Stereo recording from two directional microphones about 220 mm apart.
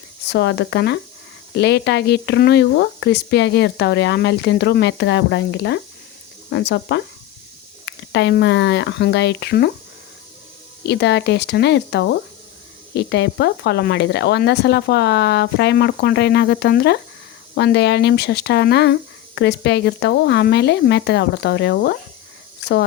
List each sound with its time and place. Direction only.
0.3 s speech: 50° left (ahead or behind)
10.8 s speech: 50° left (ahead or behind)